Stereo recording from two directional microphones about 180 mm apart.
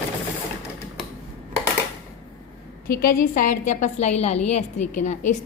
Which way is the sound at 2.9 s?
50° left (ahead or behind).